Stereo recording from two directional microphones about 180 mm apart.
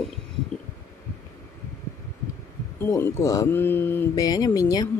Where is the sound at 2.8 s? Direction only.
15° left (ahead or behind).